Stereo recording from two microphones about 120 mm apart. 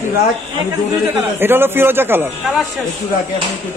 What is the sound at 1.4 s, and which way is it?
Speech, 20° right (ahead or behind).